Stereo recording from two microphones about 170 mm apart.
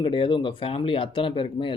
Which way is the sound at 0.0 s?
30° left (ahead or behind).